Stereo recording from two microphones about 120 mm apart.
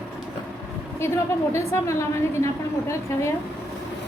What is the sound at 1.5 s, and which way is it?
A woman's voice, 25° left (ahead or behind).